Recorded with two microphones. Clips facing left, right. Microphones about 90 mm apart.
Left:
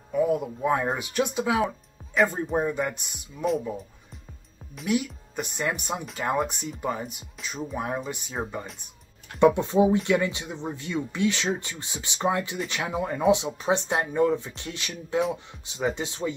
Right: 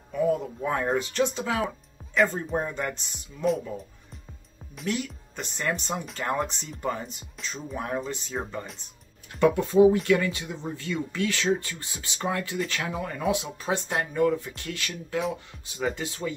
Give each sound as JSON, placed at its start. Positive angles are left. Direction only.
{"t": 0.1, "sound": "speech", "side_deg": 10}
{"t": 4.8, "sound": "speech", "side_deg": 10}
{"t": 9.4, "sound": "speech", "side_deg": 20}